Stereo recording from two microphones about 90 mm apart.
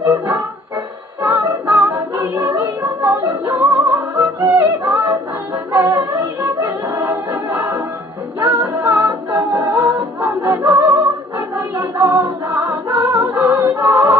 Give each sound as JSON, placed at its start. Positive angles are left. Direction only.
{"t": 0.0, "sound": "music", "side_deg": -25}
{"t": 10.7, "sound": "music", "side_deg": -20}
{"t": 11.5, "sound": "music", "side_deg": -30}